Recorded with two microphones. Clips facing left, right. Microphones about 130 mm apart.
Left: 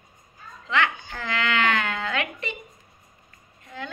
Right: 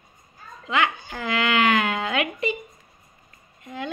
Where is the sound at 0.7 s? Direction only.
15° right (ahead or behind).